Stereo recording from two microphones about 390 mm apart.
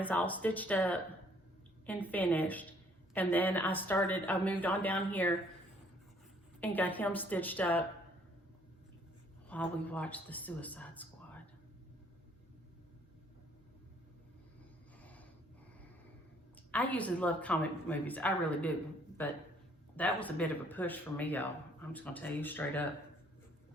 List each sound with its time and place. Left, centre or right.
0.0 s speech: centre
6.6 s speech: centre
9.5 s speech: centre
16.6 s speech: centre